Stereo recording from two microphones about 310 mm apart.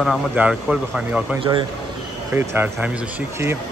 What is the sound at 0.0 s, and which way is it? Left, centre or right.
Speech, centre.